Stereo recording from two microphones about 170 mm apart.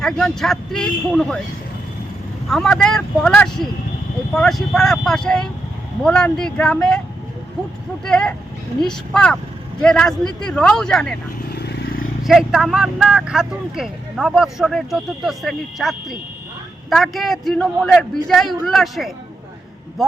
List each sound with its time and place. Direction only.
0.0 s speech: 5° left (ahead or behind)
2.5 s speech: 5° left (ahead or behind)
8.0 s speech: 5° left (ahead or behind)
11.4 s vehicle: 70° left (ahead or behind)
12.2 s speech: centre (ahead or behind)